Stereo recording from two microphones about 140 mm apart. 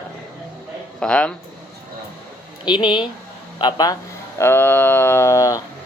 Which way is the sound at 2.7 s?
35° left (ahead or behind).